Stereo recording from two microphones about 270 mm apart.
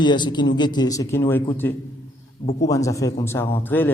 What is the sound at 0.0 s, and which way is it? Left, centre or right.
A man's voice, centre.